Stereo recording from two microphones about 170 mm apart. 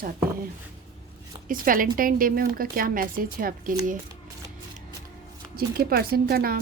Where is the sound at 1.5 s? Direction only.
55° right (ahead or behind).